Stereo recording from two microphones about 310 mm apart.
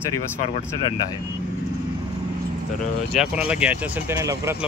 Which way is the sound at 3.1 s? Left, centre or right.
Centre.